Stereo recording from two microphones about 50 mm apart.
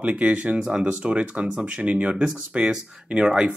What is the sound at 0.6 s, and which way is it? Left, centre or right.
Speech, centre.